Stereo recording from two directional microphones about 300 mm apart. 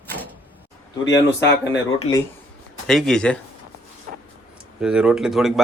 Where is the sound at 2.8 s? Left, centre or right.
Centre.